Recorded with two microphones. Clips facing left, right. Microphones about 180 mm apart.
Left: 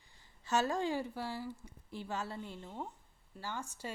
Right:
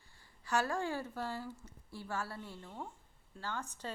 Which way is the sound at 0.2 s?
20° left (ahead or behind).